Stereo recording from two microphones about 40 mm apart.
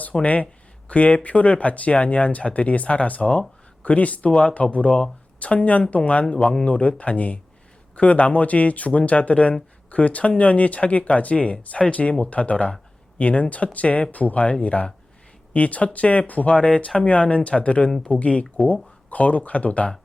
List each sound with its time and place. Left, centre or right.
0.1 s a woman's voice: left